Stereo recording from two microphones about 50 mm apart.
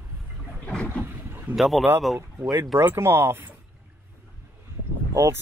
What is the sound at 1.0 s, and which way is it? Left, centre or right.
Boat, right.